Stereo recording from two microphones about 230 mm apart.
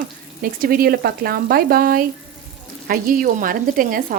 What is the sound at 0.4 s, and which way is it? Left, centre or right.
Speech, right.